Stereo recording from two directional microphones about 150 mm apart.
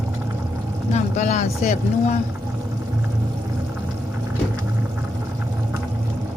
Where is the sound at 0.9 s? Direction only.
50° left (ahead or behind).